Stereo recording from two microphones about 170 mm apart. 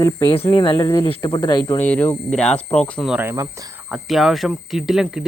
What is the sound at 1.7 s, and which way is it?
Speech, 10° left (ahead or behind).